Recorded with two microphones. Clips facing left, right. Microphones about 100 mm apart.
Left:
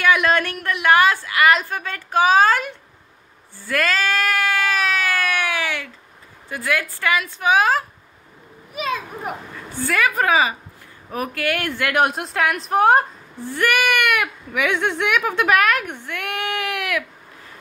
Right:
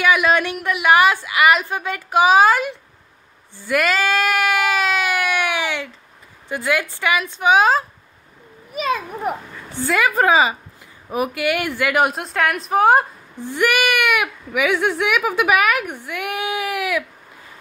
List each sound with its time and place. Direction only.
0.0 s speech: 5° right (ahead or behind)
3.6 s a sound: 15° right (ahead or behind)
6.5 s a woman's voice: 20° right (ahead or behind)
9.8 s a woman's voice: 20° right (ahead or behind)
11.1 s a woman's voice: 15° right (ahead or behind)
13.4 s speech: 15° right (ahead or behind)